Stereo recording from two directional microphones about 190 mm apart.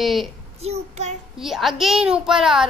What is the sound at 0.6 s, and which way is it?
Child singing, 35° right (ahead or behind).